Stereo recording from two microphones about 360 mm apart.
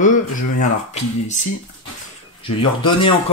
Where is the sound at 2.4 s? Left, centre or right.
Centre.